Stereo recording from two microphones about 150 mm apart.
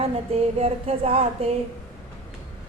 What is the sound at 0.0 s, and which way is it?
A woman's voice, 40° right (ahead or behind).